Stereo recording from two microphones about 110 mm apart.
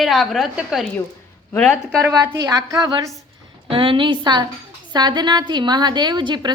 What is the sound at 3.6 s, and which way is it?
A woman's voice, 50° right (ahead or behind).